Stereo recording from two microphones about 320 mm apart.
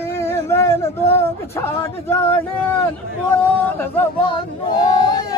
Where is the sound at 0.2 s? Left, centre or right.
Centre.